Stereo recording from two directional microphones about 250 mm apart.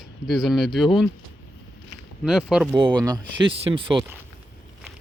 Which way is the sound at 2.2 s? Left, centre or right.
Centre.